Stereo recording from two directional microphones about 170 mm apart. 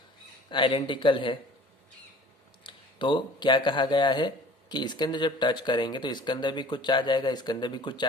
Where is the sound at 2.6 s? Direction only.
30° left (ahead or behind).